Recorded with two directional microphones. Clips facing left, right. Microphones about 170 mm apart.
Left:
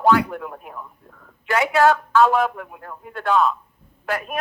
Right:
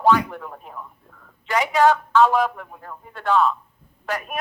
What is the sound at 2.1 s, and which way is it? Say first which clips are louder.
A woman's voice: even; 10° left (ahead or behind).